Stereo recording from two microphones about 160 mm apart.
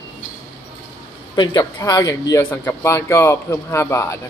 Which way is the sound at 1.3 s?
25° left (ahead or behind).